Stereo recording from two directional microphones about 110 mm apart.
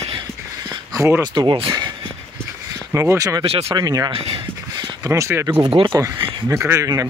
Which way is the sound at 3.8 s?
35° right (ahead or behind).